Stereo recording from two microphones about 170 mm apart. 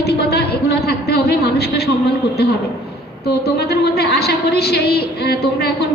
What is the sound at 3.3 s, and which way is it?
A woman's voice, 70° left (ahead or behind).